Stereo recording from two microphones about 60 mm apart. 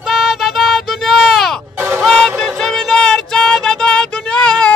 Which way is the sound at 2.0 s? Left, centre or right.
Centre.